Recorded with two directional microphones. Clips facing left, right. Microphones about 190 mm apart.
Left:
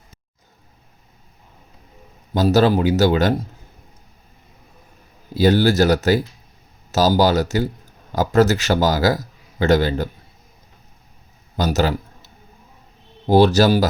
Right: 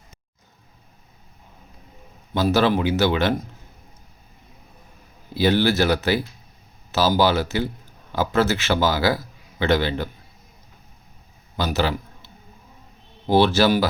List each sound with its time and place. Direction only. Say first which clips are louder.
2.3 s a man's voice: left 4 dB; 40° left (ahead or behind)
5.3 s a man's voice: left 3 dB; 45° left (ahead or behind)
11.5 s a sound: left 3 dB; 45° left (ahead or behind)
13.2 s a man's voice: left 4 dB; 40° left (ahead or behind)